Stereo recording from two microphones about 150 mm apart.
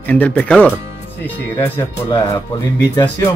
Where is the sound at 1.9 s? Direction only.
20° left (ahead or behind).